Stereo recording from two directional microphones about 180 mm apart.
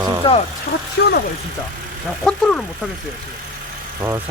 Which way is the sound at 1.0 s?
70° left (ahead or behind).